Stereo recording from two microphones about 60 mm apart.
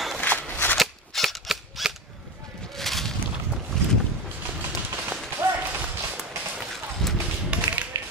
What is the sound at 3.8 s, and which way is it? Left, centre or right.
Boat, centre.